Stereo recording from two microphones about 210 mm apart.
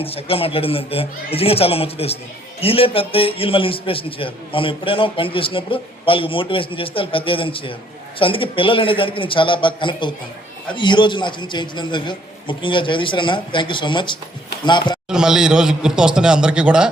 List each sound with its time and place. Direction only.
0.0 s a man's voice: 25° left (ahead or behind)
15.1 s a man's voice: 5° right (ahead or behind)